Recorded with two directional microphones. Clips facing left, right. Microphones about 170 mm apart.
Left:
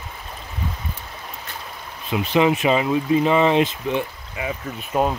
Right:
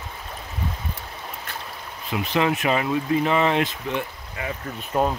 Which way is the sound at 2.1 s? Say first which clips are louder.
Left 4 dB; 20° left (ahead or behind).